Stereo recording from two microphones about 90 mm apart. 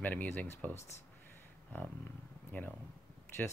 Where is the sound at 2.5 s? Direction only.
15° left (ahead or behind).